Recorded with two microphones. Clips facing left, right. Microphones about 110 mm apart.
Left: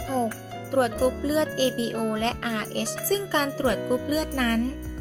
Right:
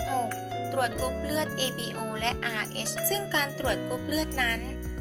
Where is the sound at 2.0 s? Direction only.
35° left (ahead or behind).